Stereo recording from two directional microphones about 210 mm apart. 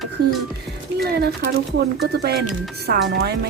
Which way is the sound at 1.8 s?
50° right (ahead or behind).